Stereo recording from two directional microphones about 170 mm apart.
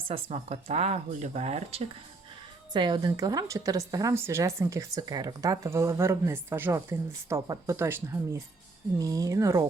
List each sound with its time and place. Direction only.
0.1 s speech: 40° right (ahead or behind)
2.7 s speech: 25° right (ahead or behind)